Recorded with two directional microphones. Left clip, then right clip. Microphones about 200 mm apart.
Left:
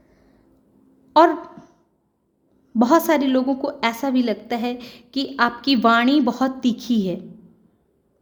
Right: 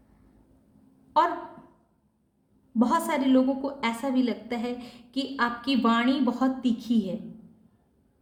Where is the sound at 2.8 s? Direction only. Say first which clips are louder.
Left 8 dB; 45° left (ahead or behind).